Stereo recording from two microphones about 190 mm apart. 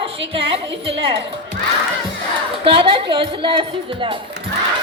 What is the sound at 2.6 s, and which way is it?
Speech, 25° right (ahead or behind).